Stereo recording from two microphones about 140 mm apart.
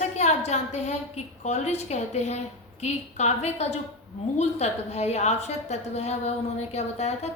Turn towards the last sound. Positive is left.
turn(degrees=50)  # may be behind; listen again after turning